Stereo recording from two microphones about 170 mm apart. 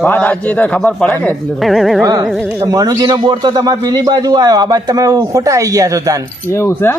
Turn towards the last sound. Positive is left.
turn(degrees=15)  # may be behind; listen again after turning